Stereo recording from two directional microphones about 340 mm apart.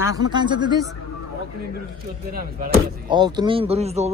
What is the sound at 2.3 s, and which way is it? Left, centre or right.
Speech, right.